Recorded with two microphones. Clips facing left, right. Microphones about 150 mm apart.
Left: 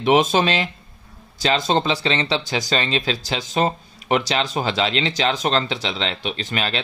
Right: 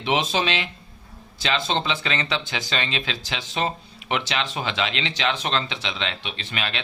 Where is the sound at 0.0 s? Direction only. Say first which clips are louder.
Left 7 dB; 45° left (ahead or behind).